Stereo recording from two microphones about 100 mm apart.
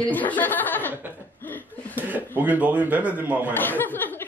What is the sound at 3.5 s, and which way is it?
Speech, 20° left (ahead or behind).